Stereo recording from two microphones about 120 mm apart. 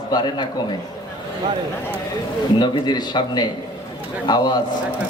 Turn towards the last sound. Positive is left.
turn(degrees=35)  # may be behind; listen again after turning